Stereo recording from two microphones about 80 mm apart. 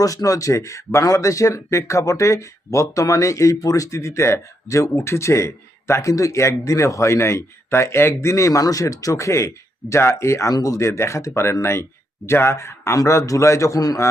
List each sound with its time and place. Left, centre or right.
0.0 s speech: left